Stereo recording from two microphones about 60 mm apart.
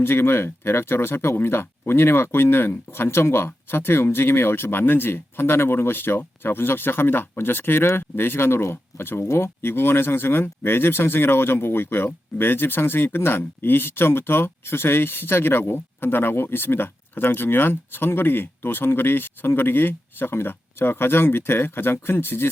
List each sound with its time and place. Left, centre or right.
0.0 s speech: left